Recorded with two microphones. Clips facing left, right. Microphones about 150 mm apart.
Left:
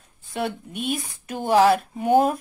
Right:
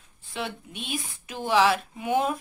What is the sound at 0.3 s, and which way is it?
Speech, 50° left (ahead or behind).